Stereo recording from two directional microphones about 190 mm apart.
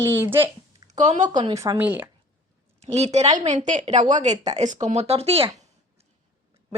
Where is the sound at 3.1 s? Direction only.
35° right (ahead or behind).